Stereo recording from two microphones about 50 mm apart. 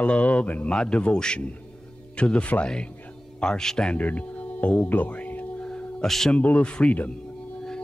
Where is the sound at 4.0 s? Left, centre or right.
Left.